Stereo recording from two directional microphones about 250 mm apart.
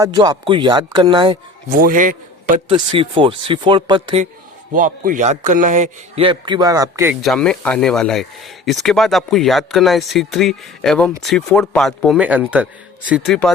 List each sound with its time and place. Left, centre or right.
0.0 s speech: centre
1.7 s a man's voice: right
3.0 s speech: right
4.7 s a man's voice: right; by 13.5 s centre